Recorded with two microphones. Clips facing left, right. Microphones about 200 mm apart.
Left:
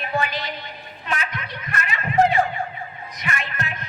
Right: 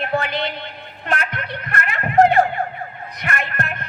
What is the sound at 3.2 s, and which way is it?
Music, 60° right (ahead or behind).